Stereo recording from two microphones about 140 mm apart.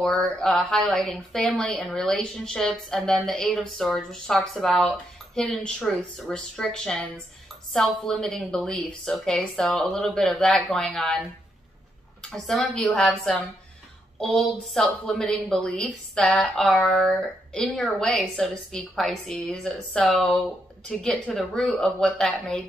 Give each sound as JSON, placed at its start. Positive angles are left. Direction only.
{"t": 0.0, "sound": "speech", "side_deg": 5}
{"t": 12.2, "sound": "speech", "side_deg": 5}